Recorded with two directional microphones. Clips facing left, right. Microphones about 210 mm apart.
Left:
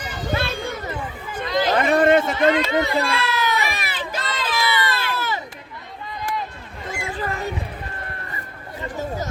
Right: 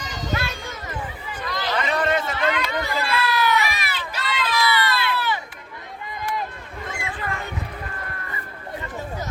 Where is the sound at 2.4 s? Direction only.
35° left (ahead or behind).